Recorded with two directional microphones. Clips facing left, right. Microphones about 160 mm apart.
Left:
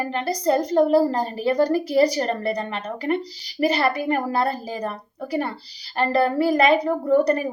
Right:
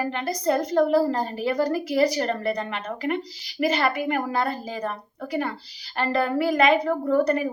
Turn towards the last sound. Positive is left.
turn(degrees=35)  # may be behind; listen again after turning